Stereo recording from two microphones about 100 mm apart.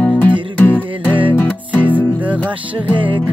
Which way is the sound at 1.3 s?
20° left (ahead or behind).